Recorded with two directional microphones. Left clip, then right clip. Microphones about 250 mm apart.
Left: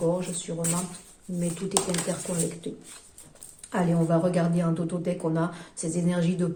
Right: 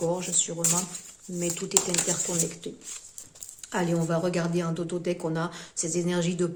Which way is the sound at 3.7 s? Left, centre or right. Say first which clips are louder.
Left 2 dB; right.